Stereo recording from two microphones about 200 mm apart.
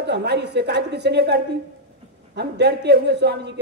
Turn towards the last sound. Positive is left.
turn(degrees=-55)  # may be behind; listen again after turning